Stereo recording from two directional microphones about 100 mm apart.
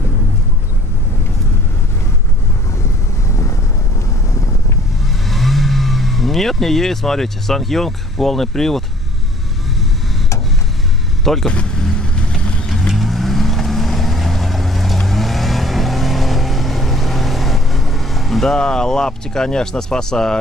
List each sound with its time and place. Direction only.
3.3 s vehicle: 30° left (ahead or behind)
5.0 s speech: centre (ahead or behind)
11.2 s vehicle: 5° left (ahead or behind)